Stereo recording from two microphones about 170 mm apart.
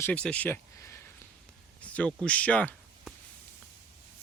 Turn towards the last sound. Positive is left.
turn(degrees=10)  # may be behind; listen again after turning